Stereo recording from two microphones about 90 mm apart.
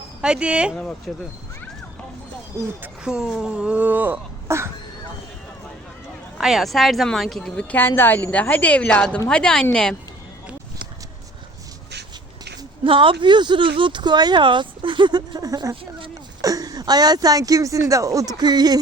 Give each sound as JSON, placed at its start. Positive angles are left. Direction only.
{"t": 0.2, "sound": "speech", "side_deg": -10}
{"t": 1.1, "sound": "a woman's voice", "side_deg": 5}
{"t": 3.0, "sound": "speech", "side_deg": -10}
{"t": 6.4, "sound": "speech", "side_deg": 0}
{"t": 7.8, "sound": "a woman's voice", "side_deg": 25}
{"t": 12.8, "sound": "speech", "side_deg": -75}
{"t": 15.7, "sound": "speech", "side_deg": -75}
{"t": 16.4, "sound": "speech", "side_deg": -45}